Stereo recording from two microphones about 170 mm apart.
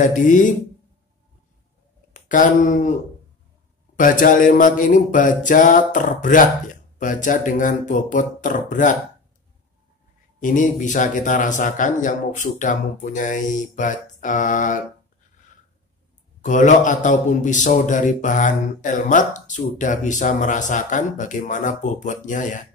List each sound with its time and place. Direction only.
0.0 s a man's voice: 50° left (ahead or behind)
2.1 s a man's voice: 50° left (ahead or behind)
10.4 s a man's voice: 50° left (ahead or behind)
16.3 s a man's voice: 50° left (ahead or behind)